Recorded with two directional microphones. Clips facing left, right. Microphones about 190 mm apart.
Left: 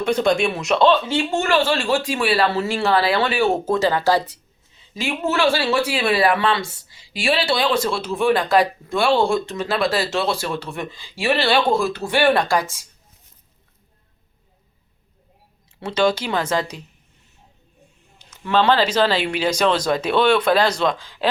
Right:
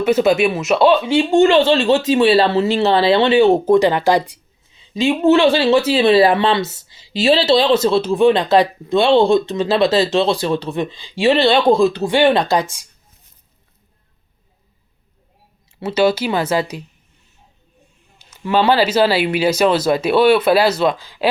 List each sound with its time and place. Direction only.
0.0 s speech: 5° right (ahead or behind); by 12.6 s 20° right (ahead or behind)
15.8 s speech: 5° right (ahead or behind)
18.2 s speech: 10° right (ahead or behind)